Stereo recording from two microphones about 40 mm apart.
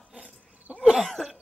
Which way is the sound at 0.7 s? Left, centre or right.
Right.